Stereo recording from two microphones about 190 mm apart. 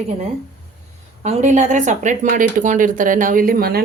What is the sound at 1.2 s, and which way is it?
Speech, 35° right (ahead or behind).